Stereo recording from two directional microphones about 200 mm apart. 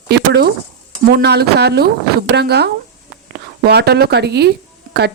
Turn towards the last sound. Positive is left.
turn(degrees=-55)  # may be behind; listen again after turning